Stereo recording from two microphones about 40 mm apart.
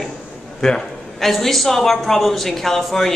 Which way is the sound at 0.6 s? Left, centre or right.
Centre.